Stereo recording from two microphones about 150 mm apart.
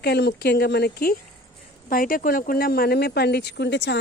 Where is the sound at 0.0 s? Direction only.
90° left.